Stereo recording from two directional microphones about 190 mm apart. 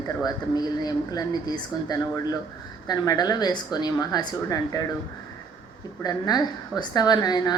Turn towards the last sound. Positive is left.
turn(degrees=20)  # may be behind; listen again after turning